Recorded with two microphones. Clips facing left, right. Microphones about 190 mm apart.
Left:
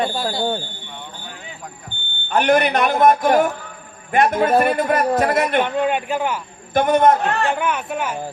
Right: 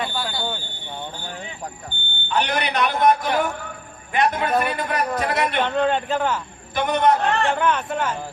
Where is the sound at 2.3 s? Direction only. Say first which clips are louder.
Left 7 dB; 50° left (ahead or behind).